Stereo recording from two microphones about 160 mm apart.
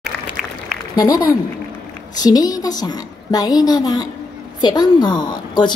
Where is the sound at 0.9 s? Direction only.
25° left (ahead or behind).